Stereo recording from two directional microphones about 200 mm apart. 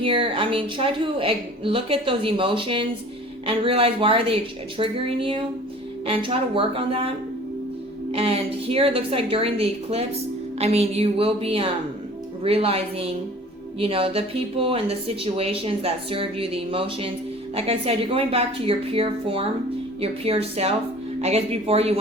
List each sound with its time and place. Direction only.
0.0 s speech: 25° right (ahead or behind)
8.1 s speech: 30° right (ahead or behind)